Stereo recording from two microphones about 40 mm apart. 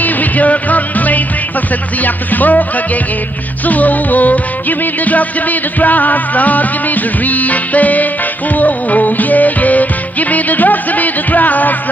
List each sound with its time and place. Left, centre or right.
0.0 s music: left
3.6 s music: left